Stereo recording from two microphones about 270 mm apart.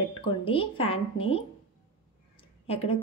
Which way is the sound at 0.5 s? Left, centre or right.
Centre.